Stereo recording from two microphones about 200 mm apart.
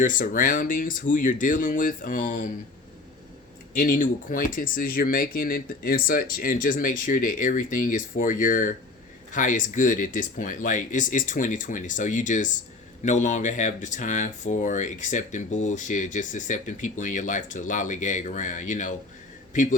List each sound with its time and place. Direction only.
0.0 s speech: 40° left (ahead or behind)
3.8 s speech: 45° left (ahead or behind)